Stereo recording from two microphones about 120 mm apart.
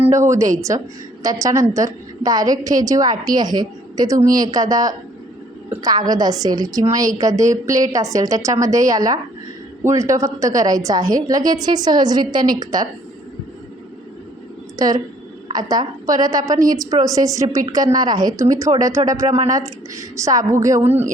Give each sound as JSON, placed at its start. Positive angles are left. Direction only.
{"t": 0.0, "sound": "a woman's voice", "side_deg": -25}
{"t": 14.8, "sound": "a woman's voice", "side_deg": -30}